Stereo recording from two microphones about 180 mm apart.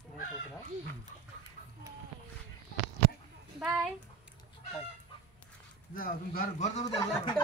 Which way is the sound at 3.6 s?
5° right (ahead or behind).